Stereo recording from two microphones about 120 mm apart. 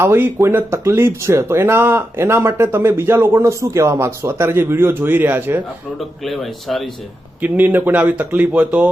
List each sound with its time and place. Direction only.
0.0 s speech: 20° right (ahead or behind)
6.2 s speech: centre (ahead or behind)
7.4 s speech: 15° right (ahead or behind)